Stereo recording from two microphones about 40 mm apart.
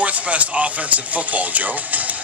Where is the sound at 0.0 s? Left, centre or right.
Right.